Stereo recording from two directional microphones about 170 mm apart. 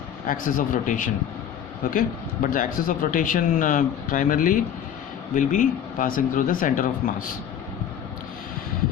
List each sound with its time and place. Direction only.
0.3 s speech: 55° left (ahead or behind)